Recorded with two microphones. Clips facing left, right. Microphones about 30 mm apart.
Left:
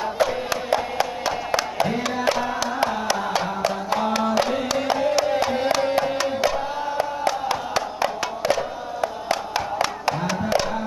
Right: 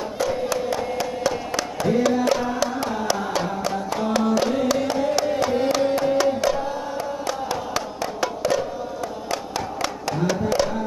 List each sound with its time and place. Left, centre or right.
0.2 s music: left
0.7 s a sound: centre
1.6 s music: left
5.1 s a sound: centre
5.7 s music: centre
9.8 s music: centre